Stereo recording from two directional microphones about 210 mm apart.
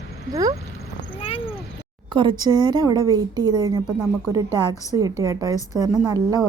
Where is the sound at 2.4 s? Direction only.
20° right (ahead or behind).